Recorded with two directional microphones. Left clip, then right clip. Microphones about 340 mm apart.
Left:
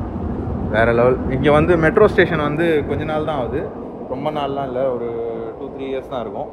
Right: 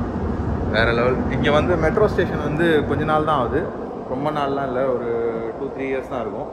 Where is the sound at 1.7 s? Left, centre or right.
Left.